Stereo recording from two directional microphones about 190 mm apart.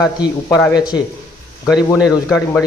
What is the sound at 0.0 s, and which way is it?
Speech, 20° left (ahead or behind).